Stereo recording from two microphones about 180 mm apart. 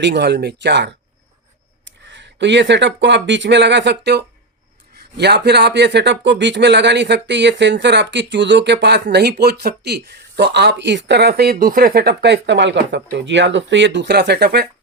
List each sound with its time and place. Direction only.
0.0 s speech: 70° right (ahead or behind)